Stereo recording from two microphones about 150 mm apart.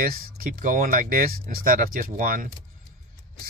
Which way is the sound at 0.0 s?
75° right (ahead or behind).